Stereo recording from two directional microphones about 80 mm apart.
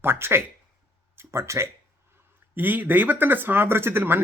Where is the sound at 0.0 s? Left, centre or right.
Right.